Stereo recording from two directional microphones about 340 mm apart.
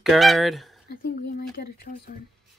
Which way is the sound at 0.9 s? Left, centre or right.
Left.